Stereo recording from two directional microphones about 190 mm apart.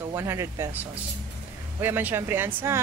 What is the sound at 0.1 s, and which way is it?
Speech, 15° right (ahead or behind).